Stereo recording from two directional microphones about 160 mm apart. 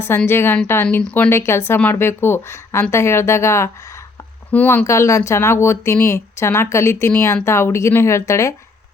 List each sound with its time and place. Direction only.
0.0 s speech: 15° left (ahead or behind)